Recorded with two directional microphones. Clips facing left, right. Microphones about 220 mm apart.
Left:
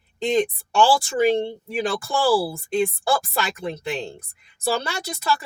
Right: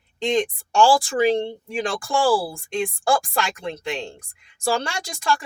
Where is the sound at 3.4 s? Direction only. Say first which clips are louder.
Even; 5° left (ahead or behind).